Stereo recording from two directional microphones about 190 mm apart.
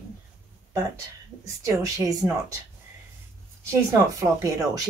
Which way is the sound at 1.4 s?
15° right (ahead or behind).